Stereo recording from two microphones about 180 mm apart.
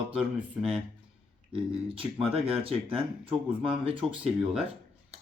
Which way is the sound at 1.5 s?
30° right (ahead or behind).